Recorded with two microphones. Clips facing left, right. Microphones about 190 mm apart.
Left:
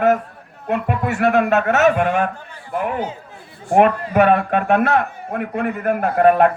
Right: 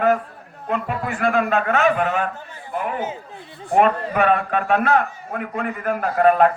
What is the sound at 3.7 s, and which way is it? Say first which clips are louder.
A man's voice: left 3 dB; 45° left (ahead or behind).